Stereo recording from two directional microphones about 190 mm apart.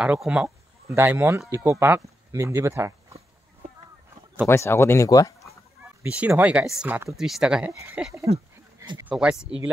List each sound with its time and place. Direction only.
0.0 s speech: 5° right (ahead or behind)
4.5 s speech: 15° left (ahead or behind)
6.0 s speech: 10° right (ahead or behind)
8.7 s a sound: 25° right (ahead or behind)
9.1 s speech: 5° right (ahead or behind)